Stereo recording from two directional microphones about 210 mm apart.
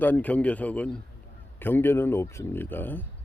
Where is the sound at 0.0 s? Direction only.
10° left (ahead or behind).